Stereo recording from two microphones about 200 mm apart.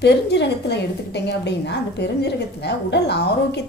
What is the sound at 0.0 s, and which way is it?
A woman's voice, 60° left (ahead or behind).